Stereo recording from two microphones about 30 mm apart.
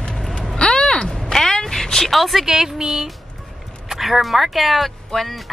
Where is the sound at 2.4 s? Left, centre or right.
Centre.